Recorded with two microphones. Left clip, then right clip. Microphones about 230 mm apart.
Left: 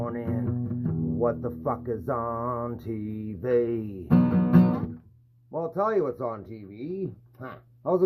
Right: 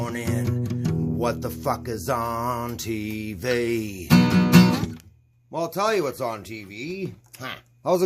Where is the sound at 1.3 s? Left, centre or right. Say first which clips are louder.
Right 3 dB; right.